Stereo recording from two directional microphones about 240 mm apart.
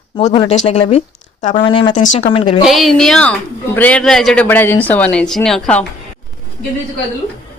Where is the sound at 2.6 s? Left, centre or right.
Centre.